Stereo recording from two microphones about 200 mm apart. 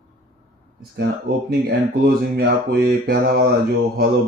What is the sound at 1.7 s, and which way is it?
Speech, 50° right (ahead or behind).